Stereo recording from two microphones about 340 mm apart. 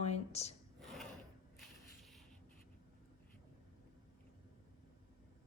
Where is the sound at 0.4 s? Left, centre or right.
Centre.